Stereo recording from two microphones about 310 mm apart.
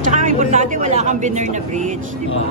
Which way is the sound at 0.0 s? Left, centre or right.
Right.